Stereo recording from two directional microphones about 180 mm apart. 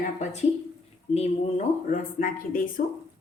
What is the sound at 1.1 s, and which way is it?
Speech, 40° left (ahead or behind).